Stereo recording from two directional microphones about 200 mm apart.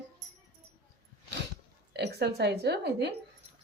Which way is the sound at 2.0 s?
55° right (ahead or behind).